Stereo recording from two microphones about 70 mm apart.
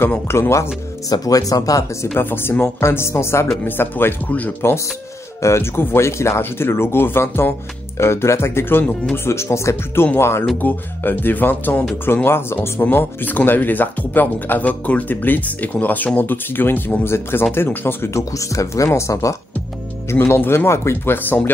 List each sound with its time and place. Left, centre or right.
0.3 s speech: left
1.0 s speech: left
2.1 s speech: left
5.4 s speech: left
10.6 s speech: left
18.3 s speech: left
20.1 s speech: left